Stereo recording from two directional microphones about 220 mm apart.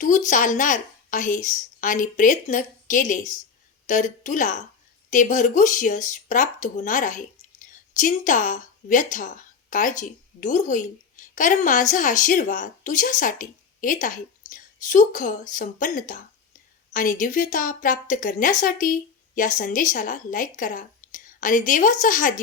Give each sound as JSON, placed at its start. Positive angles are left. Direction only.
{"t": 0.3, "sound": "a woman's voice", "side_deg": 35}